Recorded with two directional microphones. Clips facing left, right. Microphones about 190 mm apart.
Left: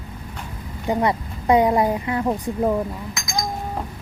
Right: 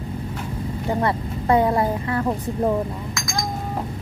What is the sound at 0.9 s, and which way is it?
A woman's voice, 15° left (ahead or behind).